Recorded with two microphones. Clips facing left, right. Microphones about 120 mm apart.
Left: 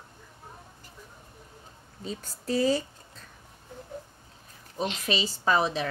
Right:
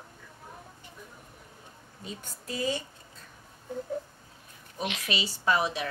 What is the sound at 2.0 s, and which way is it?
Speech, 35° left (ahead or behind).